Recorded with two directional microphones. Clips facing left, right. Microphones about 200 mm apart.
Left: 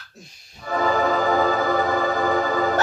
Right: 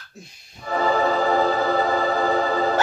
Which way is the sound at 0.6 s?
30° right (ahead or behind).